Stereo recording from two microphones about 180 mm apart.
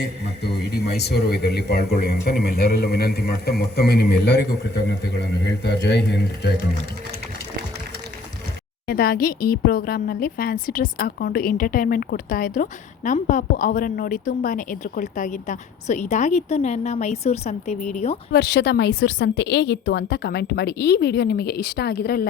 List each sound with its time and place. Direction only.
0.0 s a man's voice: 65° left (ahead or behind)
8.9 s a man's voice: 55° left (ahead or behind); by 18.2 s 40° left (ahead or behind)
18.3 s a woman's voice: 70° left (ahead or behind)